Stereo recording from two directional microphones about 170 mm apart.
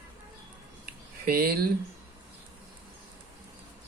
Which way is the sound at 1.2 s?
60° right (ahead or behind).